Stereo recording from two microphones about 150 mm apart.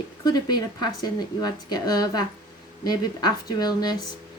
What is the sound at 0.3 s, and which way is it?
Speech, 30° left (ahead or behind).